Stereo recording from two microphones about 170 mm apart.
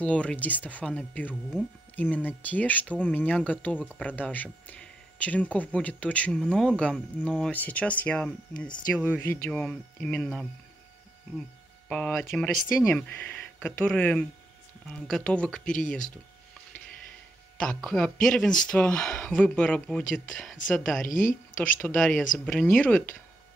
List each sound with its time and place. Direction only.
0.0 s speech: 5° left (ahead or behind)
11.9 s speech: 5° left (ahead or behind)
17.6 s speech: 5° left (ahead or behind)
21.1 s speech: 50° left (ahead or behind)
21.7 s speech: 5° left (ahead or behind)